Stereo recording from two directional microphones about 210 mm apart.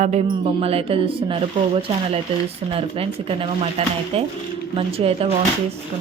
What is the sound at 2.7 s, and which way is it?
Speech, 25° right (ahead or behind).